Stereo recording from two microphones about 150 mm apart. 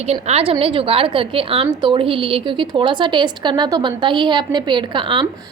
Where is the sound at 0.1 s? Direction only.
45° right (ahead or behind).